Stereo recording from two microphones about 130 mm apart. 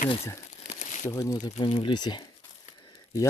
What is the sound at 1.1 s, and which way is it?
Speech, 25° left (ahead or behind).